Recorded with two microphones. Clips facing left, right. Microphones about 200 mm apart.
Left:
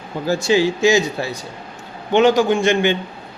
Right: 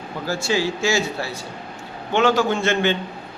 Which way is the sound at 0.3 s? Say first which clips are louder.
Left 6 dB; 20° left (ahead or behind).